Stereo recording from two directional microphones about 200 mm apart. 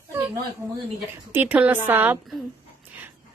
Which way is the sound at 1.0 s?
10° right (ahead or behind).